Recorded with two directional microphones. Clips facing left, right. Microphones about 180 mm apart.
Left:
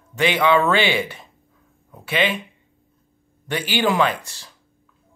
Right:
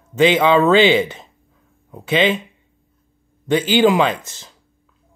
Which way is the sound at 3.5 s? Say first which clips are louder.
Right 7 dB; 20° right (ahead or behind).